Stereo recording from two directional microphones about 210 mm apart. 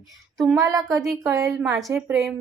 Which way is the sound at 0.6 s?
15° right (ahead or behind).